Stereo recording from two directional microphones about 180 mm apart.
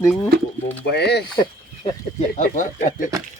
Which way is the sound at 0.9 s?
65° left (ahead or behind).